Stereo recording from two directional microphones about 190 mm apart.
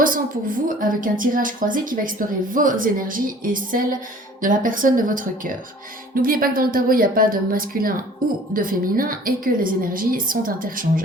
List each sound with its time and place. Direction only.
0.0 s a woman's voice: 45° right (ahead or behind)